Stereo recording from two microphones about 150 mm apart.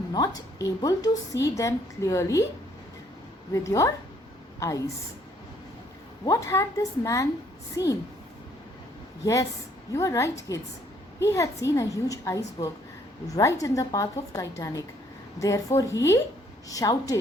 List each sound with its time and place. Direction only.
0.1 s a woman's voice: 25° left (ahead or behind)
3.5 s a woman's voice: 20° left (ahead or behind)
6.2 s a woman's voice: 20° left (ahead or behind)
9.2 s a woman's voice: 20° left (ahead or behind)